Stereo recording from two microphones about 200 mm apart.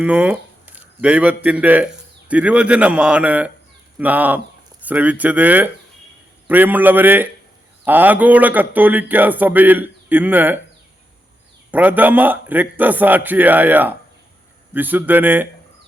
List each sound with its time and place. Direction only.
0.0 s a man's voice: 10° right (ahead or behind)
11.7 s a man's voice: 10° right (ahead or behind)